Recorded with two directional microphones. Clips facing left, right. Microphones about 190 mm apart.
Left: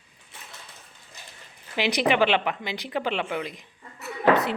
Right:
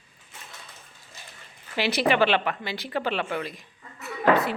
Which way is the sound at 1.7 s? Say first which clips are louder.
Even; 15° left (ahead or behind).